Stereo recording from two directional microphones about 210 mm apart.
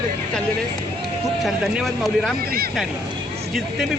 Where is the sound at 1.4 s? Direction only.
Centre (ahead or behind).